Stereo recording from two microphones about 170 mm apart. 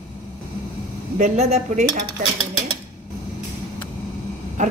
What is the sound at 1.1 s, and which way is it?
Speech, 40° right (ahead or behind).